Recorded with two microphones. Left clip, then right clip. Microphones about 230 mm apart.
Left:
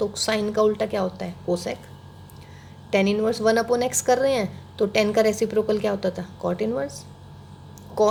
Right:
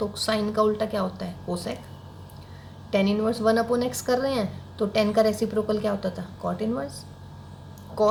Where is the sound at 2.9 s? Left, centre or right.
Left.